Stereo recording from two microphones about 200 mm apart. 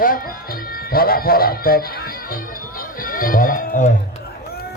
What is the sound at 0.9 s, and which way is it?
Speech, 50° left (ahead or behind).